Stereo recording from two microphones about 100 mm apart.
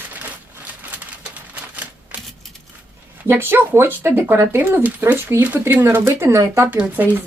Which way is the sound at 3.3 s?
20° right (ahead or behind).